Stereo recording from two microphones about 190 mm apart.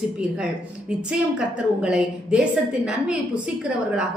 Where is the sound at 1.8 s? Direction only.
5° right (ahead or behind).